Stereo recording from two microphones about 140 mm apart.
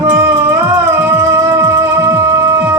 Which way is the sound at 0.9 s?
20° right (ahead or behind).